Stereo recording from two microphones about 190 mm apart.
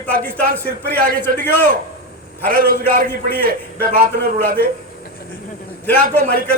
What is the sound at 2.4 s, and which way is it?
A man's voice, 50° right (ahead or behind).